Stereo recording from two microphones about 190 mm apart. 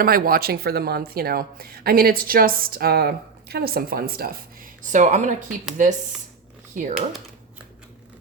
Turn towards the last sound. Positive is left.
turn(degrees=-40)  # may be behind; listen again after turning